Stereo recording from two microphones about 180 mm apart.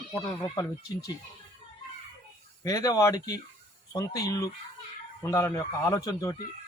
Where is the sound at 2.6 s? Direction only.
20° left (ahead or behind).